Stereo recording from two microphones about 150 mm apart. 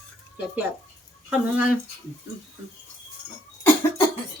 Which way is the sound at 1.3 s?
10° right (ahead or behind).